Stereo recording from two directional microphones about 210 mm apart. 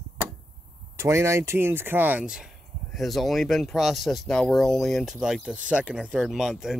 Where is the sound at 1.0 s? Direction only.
15° right (ahead or behind).